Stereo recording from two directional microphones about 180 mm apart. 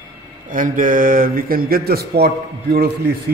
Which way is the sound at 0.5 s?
50° right (ahead or behind).